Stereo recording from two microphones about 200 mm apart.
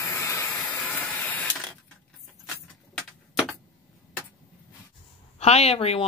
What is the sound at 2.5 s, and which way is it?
Keys jangling, centre (ahead or behind).